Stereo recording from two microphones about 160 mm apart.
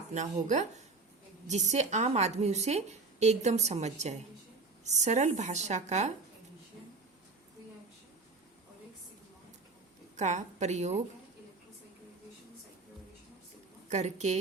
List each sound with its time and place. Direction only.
0.1 s a woman's voice: 50° right (ahead or behind)
10.2 s a woman's voice: 45° right (ahead or behind)
13.9 s a woman's voice: 45° right (ahead or behind)